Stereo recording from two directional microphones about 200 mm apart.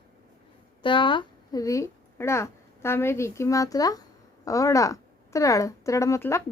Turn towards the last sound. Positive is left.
turn(degrees=15)  # may be behind; listen again after turning